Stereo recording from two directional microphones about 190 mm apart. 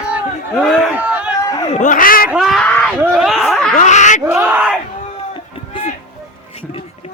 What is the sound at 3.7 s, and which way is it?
Speech, 40° left (ahead or behind).